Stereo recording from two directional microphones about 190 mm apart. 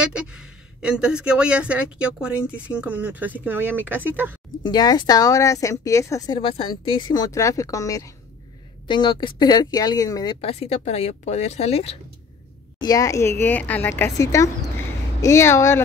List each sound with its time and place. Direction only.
0.0 s speech: 5° right (ahead or behind)
4.6 s a woman's voice: 20° left (ahead or behind)
10.4 s speech: 30° left (ahead or behind)
12.8 s speech: 20° left (ahead or behind)